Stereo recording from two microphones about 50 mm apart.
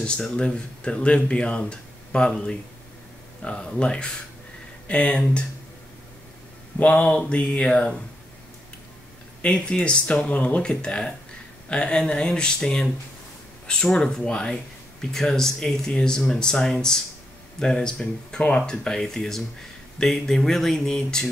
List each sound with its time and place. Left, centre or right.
0.0 s speech: centre
6.8 s speech: left
9.4 s speech: left